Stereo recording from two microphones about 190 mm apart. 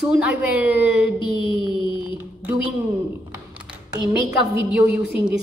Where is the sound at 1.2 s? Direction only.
25° left (ahead or behind).